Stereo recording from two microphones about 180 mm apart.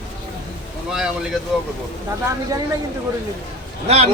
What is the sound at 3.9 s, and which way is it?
Speech, 35° right (ahead or behind).